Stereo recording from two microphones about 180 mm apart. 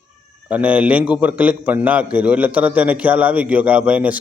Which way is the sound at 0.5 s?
10° right (ahead or behind).